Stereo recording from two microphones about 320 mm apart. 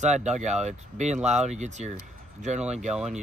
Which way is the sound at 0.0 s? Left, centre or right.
Right.